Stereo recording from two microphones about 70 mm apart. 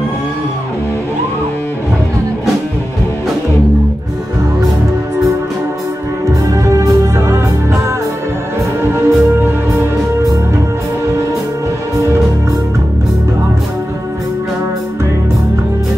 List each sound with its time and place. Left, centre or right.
6.5 s music: right
8.9 s music: right